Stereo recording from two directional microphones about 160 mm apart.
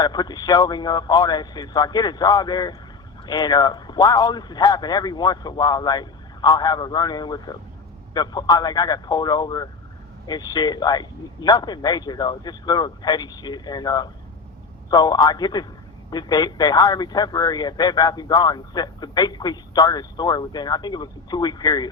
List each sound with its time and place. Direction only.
0.0 s speech: 25° left (ahead or behind)